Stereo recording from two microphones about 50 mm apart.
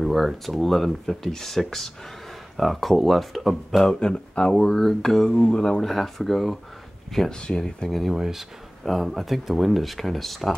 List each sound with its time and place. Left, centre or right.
0.0 s speech: centre
3.8 s speech: centre
5.3 s speech: centre
5.9 s speech: centre
7.3 s speech: centre
8.0 s speech: centre